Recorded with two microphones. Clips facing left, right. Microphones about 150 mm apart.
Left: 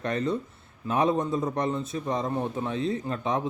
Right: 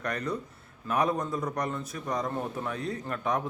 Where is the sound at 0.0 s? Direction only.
25° left (ahead or behind).